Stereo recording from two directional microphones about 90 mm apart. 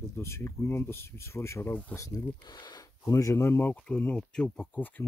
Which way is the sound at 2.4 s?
55° left (ahead or behind).